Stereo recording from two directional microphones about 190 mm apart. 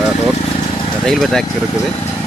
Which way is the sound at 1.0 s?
Centre (ahead or behind).